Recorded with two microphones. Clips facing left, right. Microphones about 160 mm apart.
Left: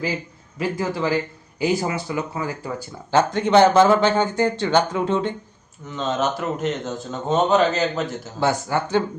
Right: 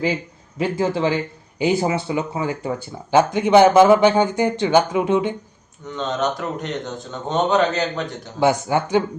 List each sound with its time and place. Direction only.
0.6 s speech: 25° right (ahead or behind)
3.1 s speech: 10° right (ahead or behind)
5.9 s a man's voice: centre (ahead or behind)
8.4 s speech: 15° right (ahead or behind)